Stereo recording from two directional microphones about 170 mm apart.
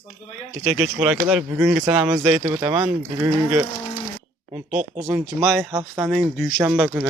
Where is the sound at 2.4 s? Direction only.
30° right (ahead or behind).